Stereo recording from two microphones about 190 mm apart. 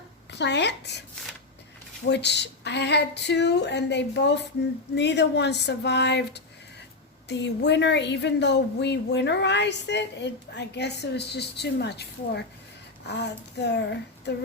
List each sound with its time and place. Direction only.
0.3 s a woman's voice: 65° left (ahead or behind)
2.0 s a woman's voice: 65° left (ahead or behind)